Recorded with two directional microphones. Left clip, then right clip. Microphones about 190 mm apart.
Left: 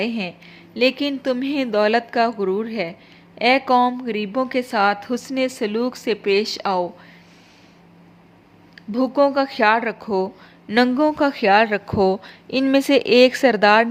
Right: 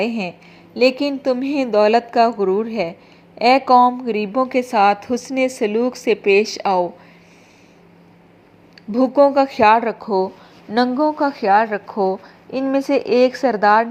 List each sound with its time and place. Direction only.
0.0 s a woman's voice: centre (ahead or behind)
8.7 s a woman's voice: centre (ahead or behind)
10.8 s speech: 40° left (ahead or behind)